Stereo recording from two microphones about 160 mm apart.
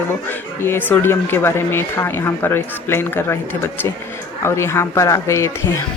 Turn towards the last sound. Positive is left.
turn(degrees=20)  # may be behind; listen again after turning